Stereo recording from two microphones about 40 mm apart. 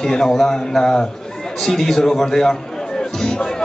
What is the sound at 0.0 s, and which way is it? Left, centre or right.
Speech, centre.